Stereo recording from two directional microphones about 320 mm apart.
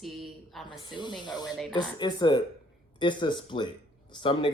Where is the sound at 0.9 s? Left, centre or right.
Centre.